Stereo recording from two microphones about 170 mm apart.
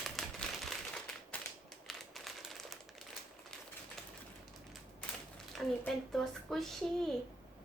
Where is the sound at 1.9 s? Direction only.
Centre (ahead or behind).